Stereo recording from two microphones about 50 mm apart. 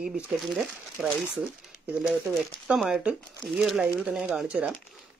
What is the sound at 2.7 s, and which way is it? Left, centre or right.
Speech, right.